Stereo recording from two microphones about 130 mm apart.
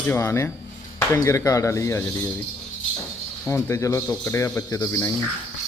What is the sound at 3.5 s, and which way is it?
Speech, 20° left (ahead or behind).